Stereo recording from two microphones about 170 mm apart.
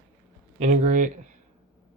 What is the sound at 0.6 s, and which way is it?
Speech, 45° right (ahead or behind).